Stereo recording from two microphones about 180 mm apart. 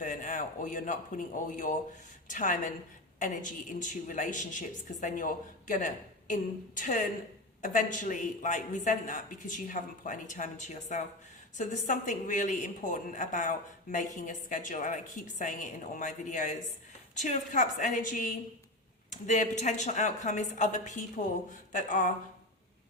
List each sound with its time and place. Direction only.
0.0 s a man's voice: 45° left (ahead or behind)